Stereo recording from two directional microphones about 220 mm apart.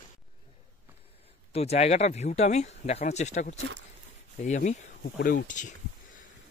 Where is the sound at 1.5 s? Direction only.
30° left (ahead or behind).